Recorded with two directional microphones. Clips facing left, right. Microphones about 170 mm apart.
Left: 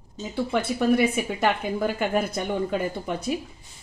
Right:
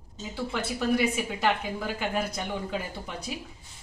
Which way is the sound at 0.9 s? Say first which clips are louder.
Left 4 dB; 55° left (ahead or behind).